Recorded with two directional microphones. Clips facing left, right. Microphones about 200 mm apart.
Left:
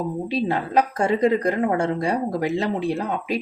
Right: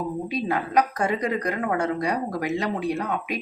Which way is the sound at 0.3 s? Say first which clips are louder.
Left 3 dB; 30° left (ahead or behind).